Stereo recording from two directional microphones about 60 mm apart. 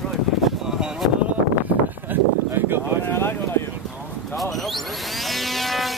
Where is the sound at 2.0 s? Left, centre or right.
Right.